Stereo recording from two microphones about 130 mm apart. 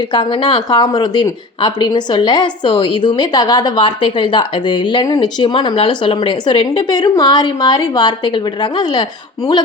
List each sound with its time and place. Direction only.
0.1 s speech: 35° left (ahead or behind)